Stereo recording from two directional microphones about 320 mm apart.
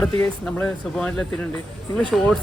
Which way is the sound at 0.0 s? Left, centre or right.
Centre.